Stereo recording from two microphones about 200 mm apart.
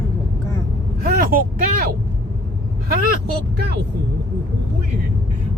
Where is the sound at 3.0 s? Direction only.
50° right (ahead or behind).